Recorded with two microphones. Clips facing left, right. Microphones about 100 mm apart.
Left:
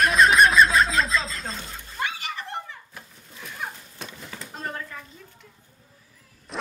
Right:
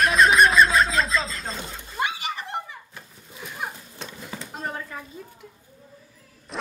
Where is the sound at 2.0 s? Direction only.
15° right (ahead or behind).